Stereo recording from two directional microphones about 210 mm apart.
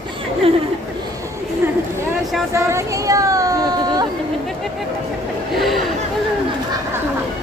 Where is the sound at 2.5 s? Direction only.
15° right (ahead or behind).